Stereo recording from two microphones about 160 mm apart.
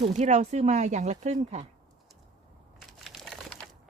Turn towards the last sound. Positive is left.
turn(degrees=5)  # may be behind; listen again after turning